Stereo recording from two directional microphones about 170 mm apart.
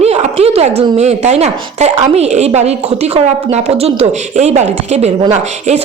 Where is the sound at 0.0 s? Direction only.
40° right (ahead or behind).